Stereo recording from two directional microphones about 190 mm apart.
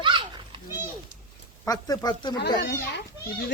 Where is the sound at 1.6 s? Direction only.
20° left (ahead or behind).